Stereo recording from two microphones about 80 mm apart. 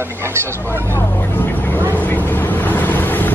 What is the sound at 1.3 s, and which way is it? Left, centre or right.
Vehicle, left.